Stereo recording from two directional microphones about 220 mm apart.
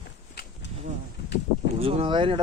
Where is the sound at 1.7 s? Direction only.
25° right (ahead or behind).